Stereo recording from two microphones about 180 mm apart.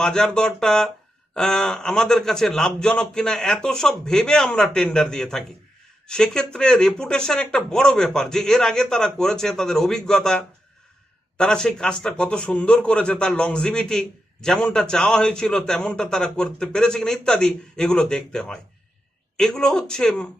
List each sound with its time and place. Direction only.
0.0 s a man's voice: 5° left (ahead or behind)